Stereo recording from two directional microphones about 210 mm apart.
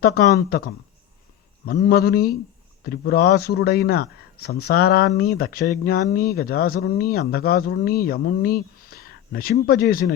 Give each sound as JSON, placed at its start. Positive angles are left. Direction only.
{"t": 0.0, "sound": "speech", "side_deg": 50}